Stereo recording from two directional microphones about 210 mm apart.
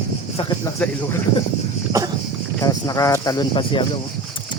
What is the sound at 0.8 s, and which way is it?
Speech, 5° left (ahead or behind).